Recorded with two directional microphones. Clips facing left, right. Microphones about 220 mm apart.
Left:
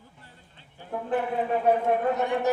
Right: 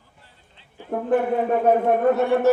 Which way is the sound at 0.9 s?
50° right (ahead or behind).